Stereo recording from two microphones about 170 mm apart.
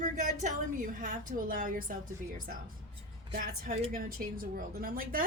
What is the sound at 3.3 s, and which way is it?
A woman's voice, 55° right (ahead or behind).